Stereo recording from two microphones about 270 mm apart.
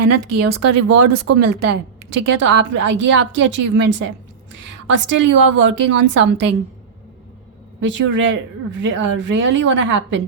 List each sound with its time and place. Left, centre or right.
0.0 s speech: right
2.0 s a woman's voice: right
7.8 s a woman's voice: right